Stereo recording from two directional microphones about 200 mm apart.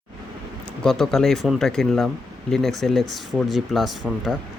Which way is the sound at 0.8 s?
Centre (ahead or behind).